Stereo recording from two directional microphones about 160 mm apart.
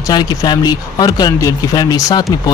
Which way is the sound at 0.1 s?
25° left (ahead or behind).